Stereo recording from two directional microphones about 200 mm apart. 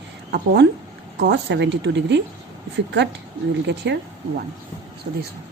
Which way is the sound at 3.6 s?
60° right (ahead or behind).